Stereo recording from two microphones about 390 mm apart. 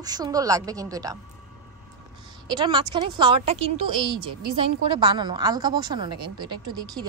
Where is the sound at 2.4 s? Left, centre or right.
Centre.